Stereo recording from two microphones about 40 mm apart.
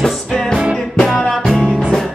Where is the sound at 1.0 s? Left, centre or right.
Centre.